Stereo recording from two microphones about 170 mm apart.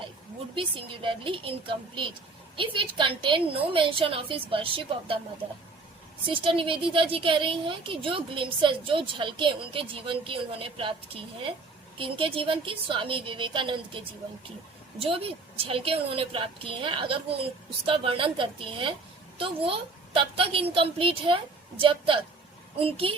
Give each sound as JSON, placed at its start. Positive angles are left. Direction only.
{"t": 0.5, "sound": "a woman's voice", "side_deg": -30}
{"t": 6.4, "sound": "a woman's voice", "side_deg": -30}